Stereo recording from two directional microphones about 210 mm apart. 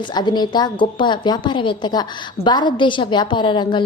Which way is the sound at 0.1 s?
20° left (ahead or behind).